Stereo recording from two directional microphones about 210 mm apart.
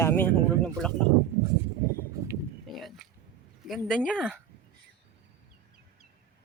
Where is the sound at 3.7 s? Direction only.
Centre (ahead or behind).